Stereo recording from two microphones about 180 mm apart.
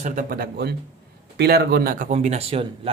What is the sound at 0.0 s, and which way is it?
Speech, 50° right (ahead or behind).